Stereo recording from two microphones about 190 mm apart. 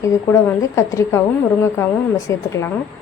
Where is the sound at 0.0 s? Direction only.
15° left (ahead or behind).